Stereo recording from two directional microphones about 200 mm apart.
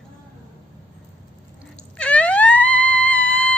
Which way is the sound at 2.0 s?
5° left (ahead or behind).